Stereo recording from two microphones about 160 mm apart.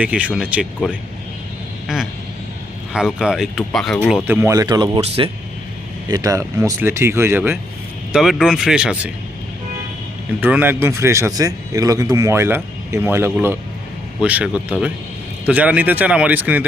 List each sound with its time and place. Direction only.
0.0 s a man's voice: 10° right (ahead or behind)
2.9 s speech: 5° right (ahead or behind)
4.3 s speech: 15° right (ahead or behind)
4.9 s speech: 35° right (ahead or behind)
6.1 s a man's voice: 20° right (ahead or behind)
8.1 s speech: centre (ahead or behind)
10.4 s a man's voice: 10° right (ahead or behind)